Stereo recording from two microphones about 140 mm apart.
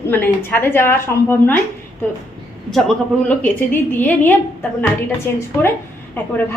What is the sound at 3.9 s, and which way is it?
A woman's voice, 15° left (ahead or behind).